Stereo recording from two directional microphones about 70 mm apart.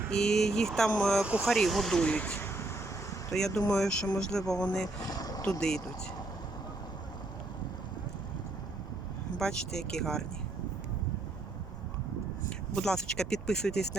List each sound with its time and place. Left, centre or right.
0.1 s speech: centre
1.2 s speech: centre
1.5 s speech: centre
2.4 s vehicle: left
3.3 s speech: centre
5.0 s boat: left
5.5 s speech: centre
9.4 s speech: centre
12.5 s speech: centre